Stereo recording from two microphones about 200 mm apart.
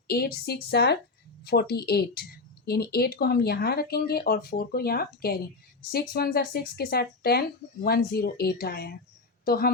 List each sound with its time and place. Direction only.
0.1 s a woman's voice: 50° left (ahead or behind)